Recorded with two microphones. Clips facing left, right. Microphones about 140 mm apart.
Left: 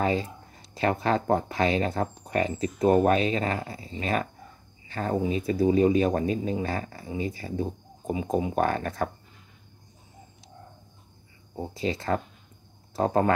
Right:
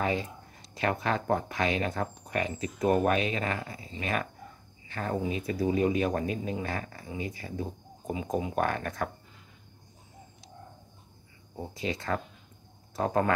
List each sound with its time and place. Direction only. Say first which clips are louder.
0.0 s speech: left 4 dB; 30° left (ahead or behind)
4.8 s cricket: left 4 dB; 30° left (ahead or behind)
5.1 s speech: left 5 dB; 25° left (ahead or behind)
11.5 s speech: left 4 dB; 30° left (ahead or behind)